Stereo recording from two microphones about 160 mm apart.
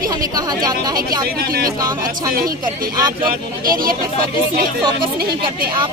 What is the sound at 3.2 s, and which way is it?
Speech, 65° right (ahead or behind).